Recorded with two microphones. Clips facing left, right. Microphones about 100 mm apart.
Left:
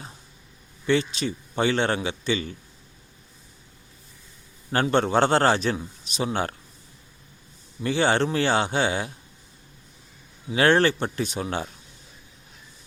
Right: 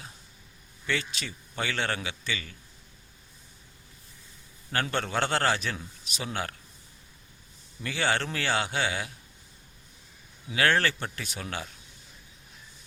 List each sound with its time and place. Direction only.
0.9 s a man's voice: 25° left (ahead or behind)
4.7 s a man's voice: 25° left (ahead or behind)
7.8 s a man's voice: 25° left (ahead or behind)
10.5 s a man's voice: 25° left (ahead or behind)